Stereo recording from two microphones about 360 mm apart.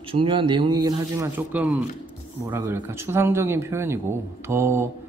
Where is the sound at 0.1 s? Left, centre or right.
Centre.